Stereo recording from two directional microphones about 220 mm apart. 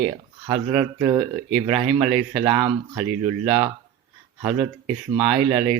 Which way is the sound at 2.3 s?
20° right (ahead or behind).